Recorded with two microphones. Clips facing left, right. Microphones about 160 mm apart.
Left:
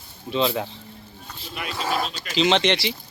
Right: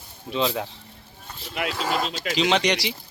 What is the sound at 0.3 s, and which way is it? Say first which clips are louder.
Speech: left 2 dB; centre (ahead or behind).